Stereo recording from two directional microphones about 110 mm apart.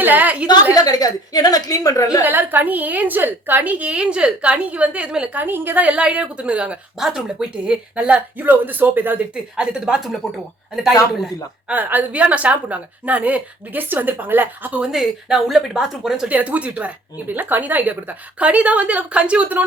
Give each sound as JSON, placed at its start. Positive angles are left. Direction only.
{"t": 0.0, "sound": "a woman's voice", "side_deg": -15}
{"t": 0.7, "sound": "a woman's voice", "side_deg": 35}
{"t": 2.2, "sound": "a woman's voice", "side_deg": -15}
{"t": 11.7, "sound": "a woman's voice", "side_deg": -15}